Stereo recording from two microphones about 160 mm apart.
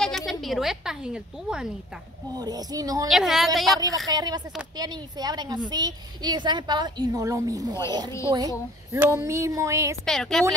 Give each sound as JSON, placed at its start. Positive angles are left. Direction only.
{"t": 0.0, "sound": "speech", "side_deg": 0}
{"t": 2.3, "sound": "a woman's voice", "side_deg": -25}
{"t": 3.1, "sound": "a woman's voice", "side_deg": 0}
{"t": 4.1, "sound": "a woman's voice", "side_deg": -25}
{"t": 10.0, "sound": "a woman's voice", "side_deg": 0}